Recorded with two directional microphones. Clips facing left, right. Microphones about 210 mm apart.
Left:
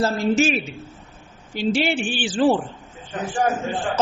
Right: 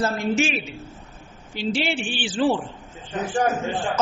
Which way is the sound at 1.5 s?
45° left (ahead or behind).